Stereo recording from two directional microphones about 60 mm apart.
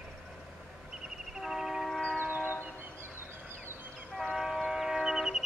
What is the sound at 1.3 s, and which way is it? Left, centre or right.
Train, centre.